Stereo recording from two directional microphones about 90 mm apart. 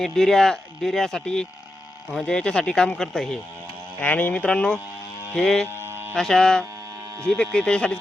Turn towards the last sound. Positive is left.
turn(degrees=10)  # may be behind; listen again after turning